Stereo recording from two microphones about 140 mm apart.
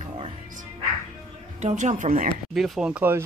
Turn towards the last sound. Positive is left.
turn(degrees=-10)  # may be behind; listen again after turning